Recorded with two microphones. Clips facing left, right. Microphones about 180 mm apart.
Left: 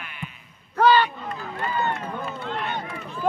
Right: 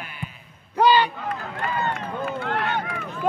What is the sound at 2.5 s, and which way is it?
Speech, 90° right.